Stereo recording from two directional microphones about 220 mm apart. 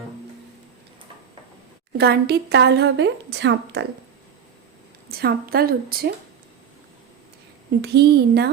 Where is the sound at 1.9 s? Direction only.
45° right (ahead or behind).